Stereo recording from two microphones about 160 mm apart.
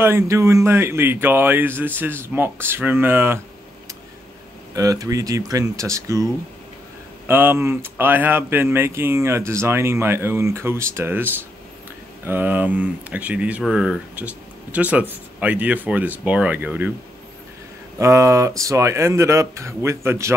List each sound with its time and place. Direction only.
0.0 s speech: 15° right (ahead or behind)
4.7 s speech: 20° right (ahead or behind)
17.9 s speech: 20° right (ahead or behind)